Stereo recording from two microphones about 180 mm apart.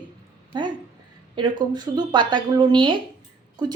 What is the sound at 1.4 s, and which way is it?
Speech, 25° right (ahead or behind).